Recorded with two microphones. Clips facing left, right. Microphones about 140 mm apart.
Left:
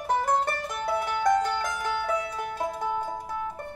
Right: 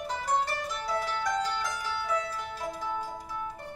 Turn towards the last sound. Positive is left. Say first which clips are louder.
# left 5 dB
turn(degrees=55)  # may be behind; listen again after turning